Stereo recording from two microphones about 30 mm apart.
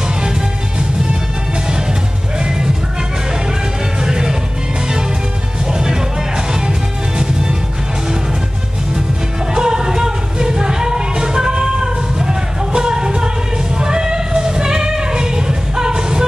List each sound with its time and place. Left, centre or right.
4.0 s music: right
5.7 s music: right
9.5 s music: right